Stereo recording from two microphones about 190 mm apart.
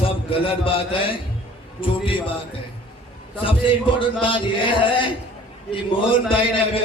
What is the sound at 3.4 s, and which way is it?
A man's voice, 25° left (ahead or behind).